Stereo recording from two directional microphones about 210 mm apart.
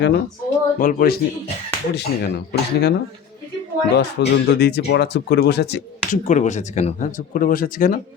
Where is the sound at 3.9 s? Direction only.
55° left (ahead or behind).